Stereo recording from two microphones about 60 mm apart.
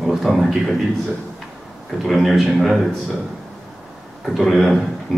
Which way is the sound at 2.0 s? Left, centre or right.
Centre.